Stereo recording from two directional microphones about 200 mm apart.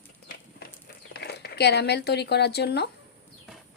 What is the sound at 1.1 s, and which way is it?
Speech, 55° left (ahead or behind).